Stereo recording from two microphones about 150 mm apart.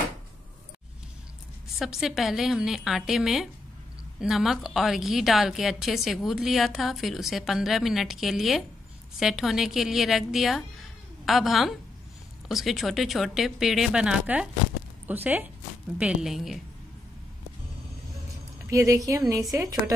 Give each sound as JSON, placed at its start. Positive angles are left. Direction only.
{"t": 1.8, "sound": "a woman's voice", "side_deg": 0}
{"t": 18.7, "sound": "speech", "side_deg": -20}